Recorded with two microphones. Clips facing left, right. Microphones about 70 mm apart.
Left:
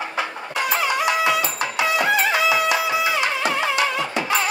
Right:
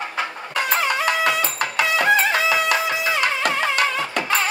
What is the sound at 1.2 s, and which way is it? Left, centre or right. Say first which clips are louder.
Music: even; right.